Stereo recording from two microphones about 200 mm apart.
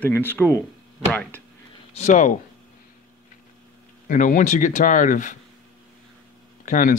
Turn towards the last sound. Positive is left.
turn(degrees=40)  # may be behind; listen again after turning